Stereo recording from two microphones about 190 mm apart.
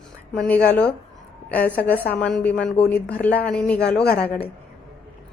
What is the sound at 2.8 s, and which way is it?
Speech, 55° left (ahead or behind).